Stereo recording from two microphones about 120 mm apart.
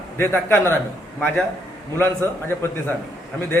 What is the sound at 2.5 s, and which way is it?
Speech, 20° left (ahead or behind).